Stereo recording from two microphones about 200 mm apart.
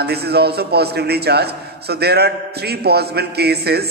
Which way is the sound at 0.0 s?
55° right (ahead or behind).